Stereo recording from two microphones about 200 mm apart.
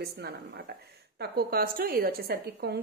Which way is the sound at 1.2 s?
50° right (ahead or behind).